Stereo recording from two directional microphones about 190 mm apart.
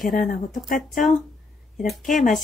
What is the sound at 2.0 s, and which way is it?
Speech, 45° left (ahead or behind).